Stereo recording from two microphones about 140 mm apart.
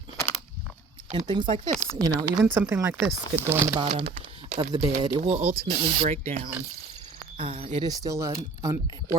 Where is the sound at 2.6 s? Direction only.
20° right (ahead or behind).